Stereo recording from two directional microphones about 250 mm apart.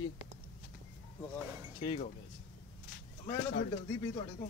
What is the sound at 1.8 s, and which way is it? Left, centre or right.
Speech, centre.